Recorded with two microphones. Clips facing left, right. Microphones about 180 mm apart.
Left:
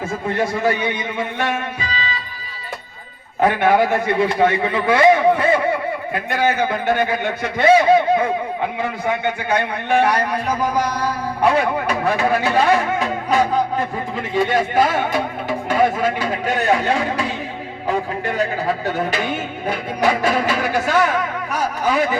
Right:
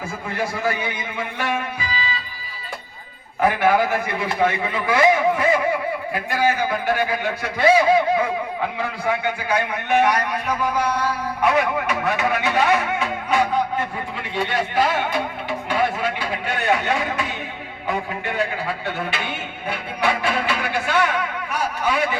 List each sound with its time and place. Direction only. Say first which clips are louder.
0.3 s a man's voice: left 4 dB; 25° left (ahead or behind)
3.4 s a man's voice: left 2 dB; 25° left (ahead or behind); by 22.2 s 40° left (ahead or behind)